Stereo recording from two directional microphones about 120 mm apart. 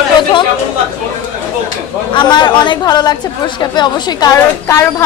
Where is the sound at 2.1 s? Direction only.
40° left (ahead or behind).